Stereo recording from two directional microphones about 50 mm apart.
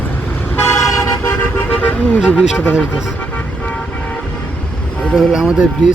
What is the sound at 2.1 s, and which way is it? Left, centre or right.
Speech, left.